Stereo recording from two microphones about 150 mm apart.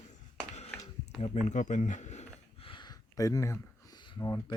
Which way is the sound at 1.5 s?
55° left (ahead or behind).